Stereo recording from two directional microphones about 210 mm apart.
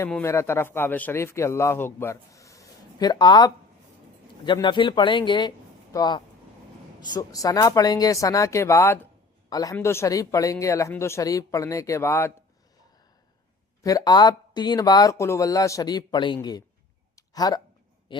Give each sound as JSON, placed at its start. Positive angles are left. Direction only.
{"t": 0.0, "sound": "a man's voice", "side_deg": 10}
{"t": 13.8, "sound": "speech", "side_deg": 15}
{"t": 17.2, "sound": "a sound", "side_deg": 20}
{"t": 18.1, "sound": "a man's voice", "side_deg": 25}